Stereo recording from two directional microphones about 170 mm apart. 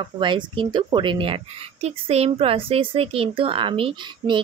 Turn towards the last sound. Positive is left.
turn(degrees=-30)  # may be behind; listen again after turning